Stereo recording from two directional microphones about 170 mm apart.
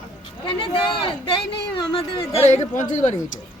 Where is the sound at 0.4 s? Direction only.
30° left (ahead or behind).